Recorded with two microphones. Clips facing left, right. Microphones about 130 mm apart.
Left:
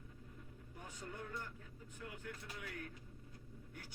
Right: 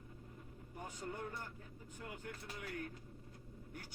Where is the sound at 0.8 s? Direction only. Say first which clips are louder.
Right 4 dB; 40° right (ahead or behind).